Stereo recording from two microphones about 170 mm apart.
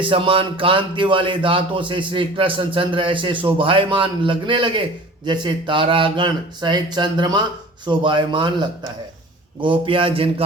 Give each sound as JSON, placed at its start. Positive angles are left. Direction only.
{"t": 0.0, "sound": "speech", "side_deg": -30}